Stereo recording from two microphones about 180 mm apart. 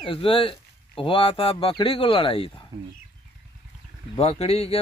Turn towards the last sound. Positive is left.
turn(degrees=35)  # may be behind; listen again after turning